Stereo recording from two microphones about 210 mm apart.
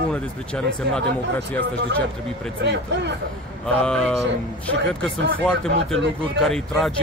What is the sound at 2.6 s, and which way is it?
Speech, 55° right (ahead or behind).